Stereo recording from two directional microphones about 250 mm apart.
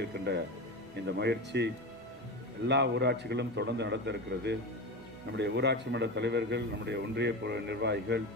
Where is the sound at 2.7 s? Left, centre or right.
Right.